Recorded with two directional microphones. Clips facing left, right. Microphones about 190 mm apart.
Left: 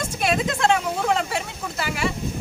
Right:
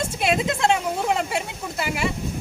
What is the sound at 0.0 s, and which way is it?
Vehicle, 20° right (ahead or behind).